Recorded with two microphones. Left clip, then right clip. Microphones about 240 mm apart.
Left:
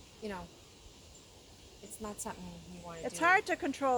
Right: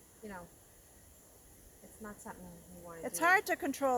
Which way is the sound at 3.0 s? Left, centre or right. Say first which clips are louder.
Left 1 dB; right.